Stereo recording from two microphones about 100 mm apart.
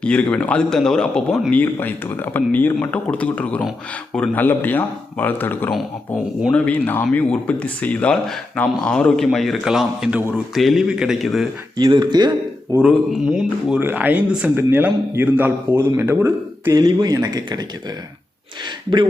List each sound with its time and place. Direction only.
0.0 s a man's voice: 10° left (ahead or behind)
11.8 s speech: 45° right (ahead or behind)
12.7 s a man's voice: 30° right (ahead or behind)
13.2 s speech: 5° right (ahead or behind)
13.7 s a man's voice: 20° right (ahead or behind)
16.7 s speech: 40° right (ahead or behind)